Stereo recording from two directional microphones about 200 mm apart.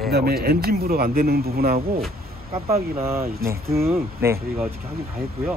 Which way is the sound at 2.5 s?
30° right (ahead or behind).